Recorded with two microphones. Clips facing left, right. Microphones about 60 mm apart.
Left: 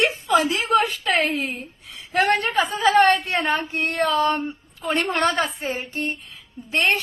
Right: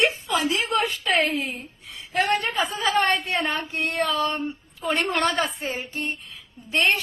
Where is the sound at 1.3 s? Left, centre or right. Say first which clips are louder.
Left 2 dB; left.